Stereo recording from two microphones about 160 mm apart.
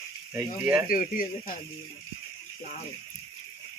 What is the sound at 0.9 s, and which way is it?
Speech, 60° left (ahead or behind).